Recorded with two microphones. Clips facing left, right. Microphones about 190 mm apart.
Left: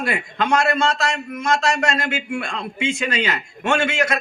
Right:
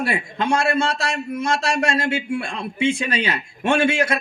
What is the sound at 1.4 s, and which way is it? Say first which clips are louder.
A man's voice: left 1 dB; 30° right (ahead or behind).